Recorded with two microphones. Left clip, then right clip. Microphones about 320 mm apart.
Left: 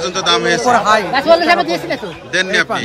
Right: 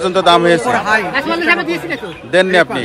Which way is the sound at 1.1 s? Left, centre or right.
Left.